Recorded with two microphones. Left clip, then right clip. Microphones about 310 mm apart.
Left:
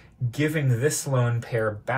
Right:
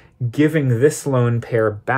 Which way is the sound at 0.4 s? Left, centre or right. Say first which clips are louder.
Right 9 dB; right.